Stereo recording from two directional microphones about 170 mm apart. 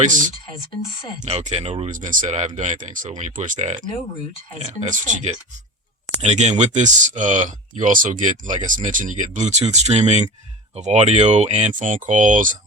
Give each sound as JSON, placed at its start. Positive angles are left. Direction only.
{"t": 0.0, "sound": "speech", "side_deg": -50}
{"t": 1.9, "sound": "speech", "side_deg": -50}